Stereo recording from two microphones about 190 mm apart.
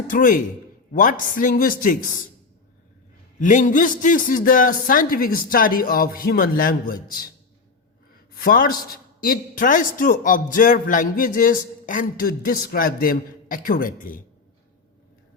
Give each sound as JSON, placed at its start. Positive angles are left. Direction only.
{"t": 0.1, "sound": "a man's voice", "side_deg": 45}
{"t": 3.4, "sound": "a man's voice", "side_deg": 40}